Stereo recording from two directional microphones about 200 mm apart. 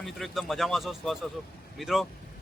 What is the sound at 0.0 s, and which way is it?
A man's voice, centre (ahead or behind).